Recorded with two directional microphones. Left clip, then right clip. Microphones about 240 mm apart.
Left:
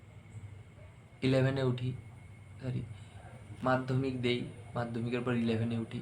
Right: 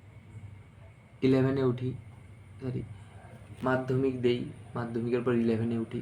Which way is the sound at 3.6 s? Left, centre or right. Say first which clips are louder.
Right 3 dB; centre.